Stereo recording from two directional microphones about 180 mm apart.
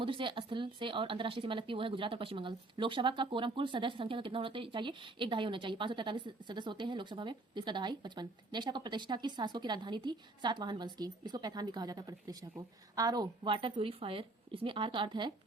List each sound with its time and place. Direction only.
0.0 s speech: 30° right (ahead or behind)